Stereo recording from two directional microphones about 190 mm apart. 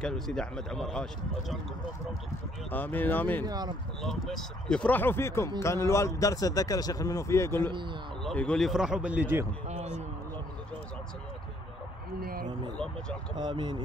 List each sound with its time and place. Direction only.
0.0 s speech: 5° left (ahead or behind)
2.7 s speech: 10° left (ahead or behind)
3.4 s speech: 20° right (ahead or behind)
4.0 s speech: centre (ahead or behind)
12.2 s speech: 50° right (ahead or behind)
12.7 s speech: 5° left (ahead or behind)
13.4 s speech: 25° right (ahead or behind)